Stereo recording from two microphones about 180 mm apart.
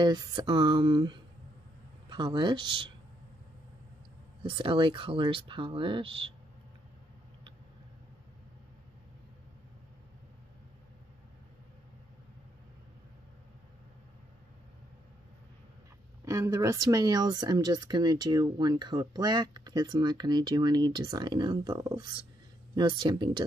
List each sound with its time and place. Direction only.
0.0 s speech: 25° right (ahead or behind)
4.4 s speech: 30° right (ahead or behind)
16.3 s speech: 15° right (ahead or behind)